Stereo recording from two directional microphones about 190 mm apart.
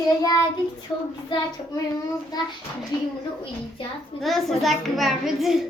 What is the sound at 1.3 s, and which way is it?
Child singing, 25° left (ahead or behind).